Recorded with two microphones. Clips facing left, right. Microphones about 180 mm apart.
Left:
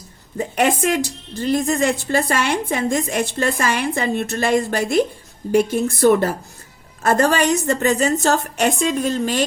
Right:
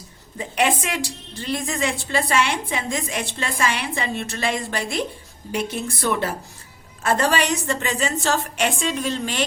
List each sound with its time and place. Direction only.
0.3 s a woman's voice: 45° left (ahead or behind)